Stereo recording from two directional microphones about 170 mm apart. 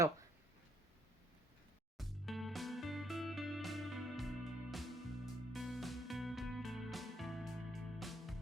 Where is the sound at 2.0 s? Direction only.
Centre (ahead or behind).